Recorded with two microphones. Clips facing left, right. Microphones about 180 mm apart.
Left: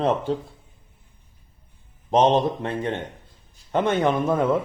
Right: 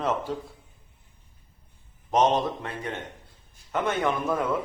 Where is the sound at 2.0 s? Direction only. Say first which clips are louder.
Left 4 dB; 30° left (ahead or behind).